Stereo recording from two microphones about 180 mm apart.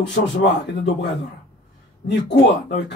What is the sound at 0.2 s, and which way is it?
Speech, 50° left (ahead or behind).